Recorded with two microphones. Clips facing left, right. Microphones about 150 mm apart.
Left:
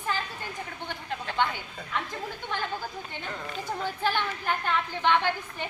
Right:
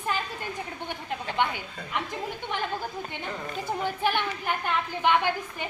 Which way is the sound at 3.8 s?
15° right (ahead or behind).